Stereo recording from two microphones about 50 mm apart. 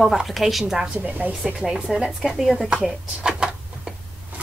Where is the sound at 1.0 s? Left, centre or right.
Right.